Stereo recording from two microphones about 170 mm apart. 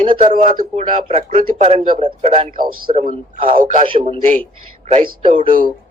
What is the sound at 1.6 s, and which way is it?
A man's voice, 45° right (ahead or behind).